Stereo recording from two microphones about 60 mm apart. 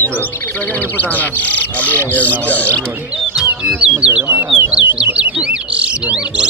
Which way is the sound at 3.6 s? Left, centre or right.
Centre.